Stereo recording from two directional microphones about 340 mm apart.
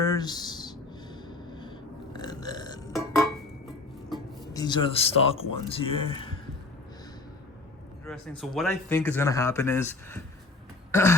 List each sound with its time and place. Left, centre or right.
0.0 s a sound: centre
1.3 s burping: centre
2.9 s burping: centre
4.1 s music: centre
5.6 s speech: centre
8.0 s speech: centre